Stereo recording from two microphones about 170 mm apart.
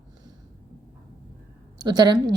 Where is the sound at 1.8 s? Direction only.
25° right (ahead or behind).